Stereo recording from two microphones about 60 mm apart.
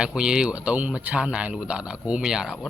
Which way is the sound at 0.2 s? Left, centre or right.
Centre.